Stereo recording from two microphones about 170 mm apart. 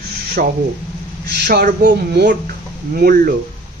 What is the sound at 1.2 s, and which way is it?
Speech, 75° right (ahead or behind).